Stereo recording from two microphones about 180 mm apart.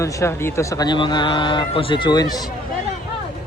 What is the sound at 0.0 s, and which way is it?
Speech, 15° left (ahead or behind).